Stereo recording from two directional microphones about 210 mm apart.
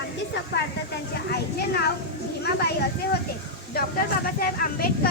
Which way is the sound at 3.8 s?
45° left (ahead or behind).